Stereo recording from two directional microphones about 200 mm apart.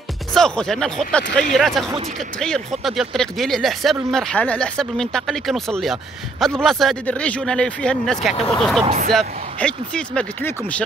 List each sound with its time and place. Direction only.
0.3 s speech: 5° left (ahead or behind)